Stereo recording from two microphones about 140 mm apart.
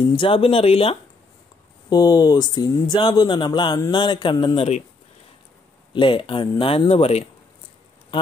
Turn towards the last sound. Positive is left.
turn(degrees=45)  # may be behind; listen again after turning